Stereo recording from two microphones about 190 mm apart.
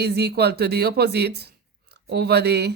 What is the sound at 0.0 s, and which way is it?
Speech, 60° right (ahead or behind).